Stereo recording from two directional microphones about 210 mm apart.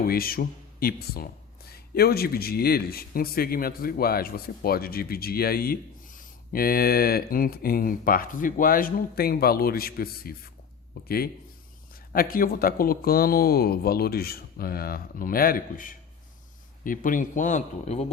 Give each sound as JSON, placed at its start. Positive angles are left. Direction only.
{"t": 0.1, "sound": "speech", "side_deg": 45}
{"t": 12.1, "sound": "speech", "side_deg": 45}